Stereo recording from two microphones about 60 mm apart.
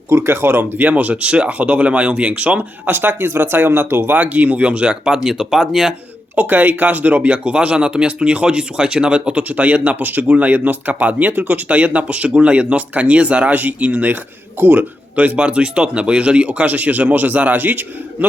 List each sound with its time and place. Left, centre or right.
0.1 s speech: right
4.2 s speech: right; by 5.9 s centre
6.3 s speech: right
15.1 s speech: right